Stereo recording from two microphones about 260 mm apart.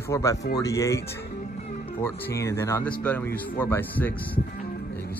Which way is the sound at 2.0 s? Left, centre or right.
Centre.